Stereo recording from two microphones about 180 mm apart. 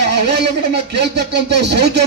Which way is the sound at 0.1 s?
65° right (ahead or behind).